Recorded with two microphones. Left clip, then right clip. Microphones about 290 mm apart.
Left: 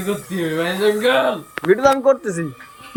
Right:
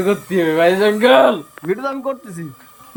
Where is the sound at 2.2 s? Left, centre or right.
Left.